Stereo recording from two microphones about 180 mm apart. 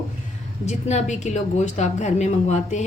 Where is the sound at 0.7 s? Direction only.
40° left (ahead or behind).